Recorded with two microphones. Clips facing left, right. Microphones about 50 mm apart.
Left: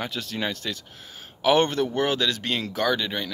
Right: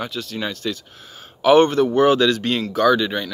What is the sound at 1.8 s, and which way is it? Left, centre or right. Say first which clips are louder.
Speech: right 9 dB; centre.